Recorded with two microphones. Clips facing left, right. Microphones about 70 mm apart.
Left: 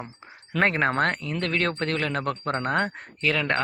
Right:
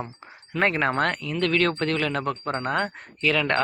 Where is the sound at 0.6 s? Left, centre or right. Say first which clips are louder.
Even; left.